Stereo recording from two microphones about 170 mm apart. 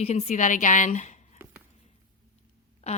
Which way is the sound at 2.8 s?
40° left (ahead or behind).